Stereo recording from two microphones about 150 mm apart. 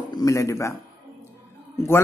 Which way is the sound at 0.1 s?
25° left (ahead or behind).